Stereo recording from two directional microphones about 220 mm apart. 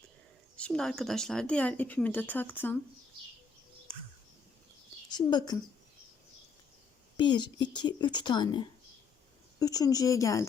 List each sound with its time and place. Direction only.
0.5 s speech: 5° left (ahead or behind)
5.1 s speech: 20° left (ahead or behind)
7.2 s speech: 20° left (ahead or behind)